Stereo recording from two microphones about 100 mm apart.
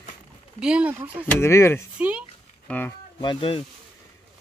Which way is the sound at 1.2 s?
30° left (ahead or behind).